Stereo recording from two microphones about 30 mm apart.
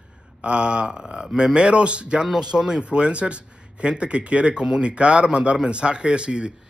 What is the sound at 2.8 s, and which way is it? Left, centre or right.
Speech, right.